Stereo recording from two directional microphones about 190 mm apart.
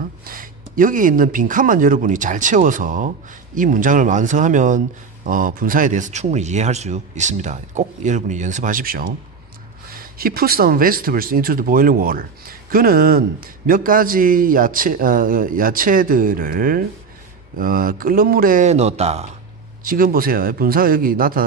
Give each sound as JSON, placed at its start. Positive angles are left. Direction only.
{"t": 0.2, "sound": "a man's voice", "side_deg": -45}
{"t": 10.1, "sound": "a man's voice", "side_deg": -50}
{"t": 19.8, "sound": "a man's voice", "side_deg": -45}